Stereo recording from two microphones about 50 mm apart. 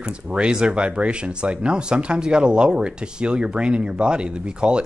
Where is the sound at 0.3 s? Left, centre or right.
Centre.